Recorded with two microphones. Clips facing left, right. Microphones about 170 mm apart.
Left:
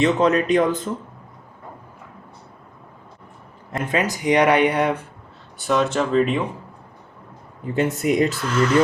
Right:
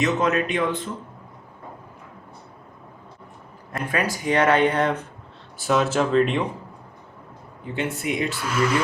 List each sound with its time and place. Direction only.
0.0 s a man's voice: 35° left (ahead or behind)
3.8 s speech: 20° left (ahead or behind)
5.5 s speech: centre (ahead or behind)
7.7 s a man's voice: 40° left (ahead or behind)
8.4 s speech: 10° right (ahead or behind)